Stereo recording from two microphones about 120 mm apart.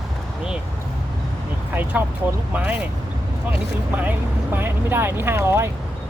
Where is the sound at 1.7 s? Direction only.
15° right (ahead or behind).